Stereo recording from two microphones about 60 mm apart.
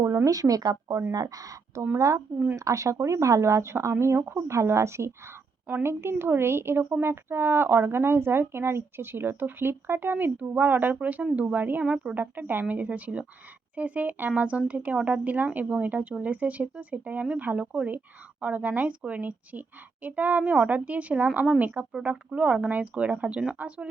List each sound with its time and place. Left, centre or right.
0.3 s speech: right
2.0 s speech: right